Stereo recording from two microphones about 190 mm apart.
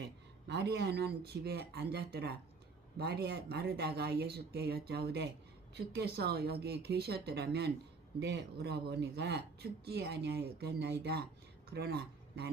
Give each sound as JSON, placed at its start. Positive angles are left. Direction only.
{"t": 0.0, "sound": "speech", "side_deg": -60}